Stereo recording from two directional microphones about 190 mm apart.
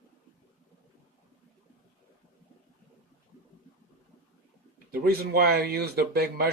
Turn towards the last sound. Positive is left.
turn(degrees=-55)  # may be behind; listen again after turning